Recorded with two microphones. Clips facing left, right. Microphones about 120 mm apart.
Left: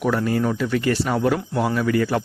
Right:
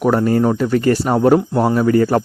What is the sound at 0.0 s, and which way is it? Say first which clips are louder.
Speech: right 6 dB; 40° right (ahead or behind).